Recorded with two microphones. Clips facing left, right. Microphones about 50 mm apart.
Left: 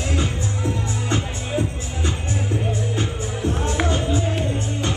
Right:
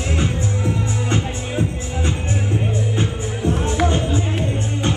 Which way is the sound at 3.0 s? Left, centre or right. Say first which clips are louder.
Right 2 dB; right.